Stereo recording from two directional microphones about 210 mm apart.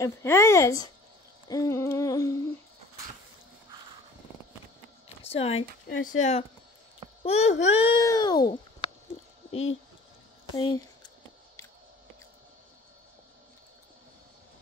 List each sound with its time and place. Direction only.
0.0 s speech: 15° left (ahead or behind)
1.5 s humming: 15° left (ahead or behind)
5.2 s speech: 30° left (ahead or behind)
7.6 s babbling: 25° left (ahead or behind)
9.5 s speech: 30° left (ahead or behind)